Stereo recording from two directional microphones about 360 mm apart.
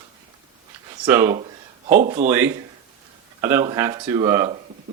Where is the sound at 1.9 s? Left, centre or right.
Right.